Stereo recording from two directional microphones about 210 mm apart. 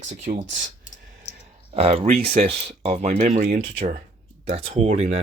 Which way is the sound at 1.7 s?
30° right (ahead or behind).